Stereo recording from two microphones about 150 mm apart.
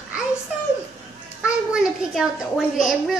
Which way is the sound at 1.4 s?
5° right (ahead or behind).